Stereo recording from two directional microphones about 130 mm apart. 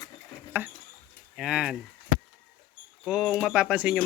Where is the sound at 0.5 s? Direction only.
15° right (ahead or behind).